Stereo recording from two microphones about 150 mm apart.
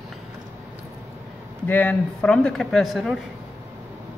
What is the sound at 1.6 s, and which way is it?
Speech, 10° left (ahead or behind).